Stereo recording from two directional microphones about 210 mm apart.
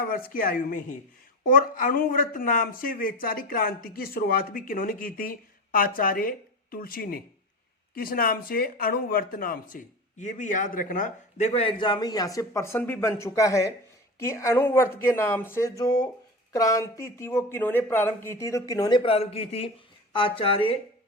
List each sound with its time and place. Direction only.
0.3 s a man's voice: 40° left (ahead or behind); by 20.7 s 25° left (ahead or behind)